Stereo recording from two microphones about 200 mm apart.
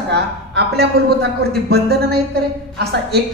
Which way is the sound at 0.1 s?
55° right (ahead or behind).